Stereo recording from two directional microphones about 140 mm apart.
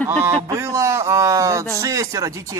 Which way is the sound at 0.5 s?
20° right (ahead or behind).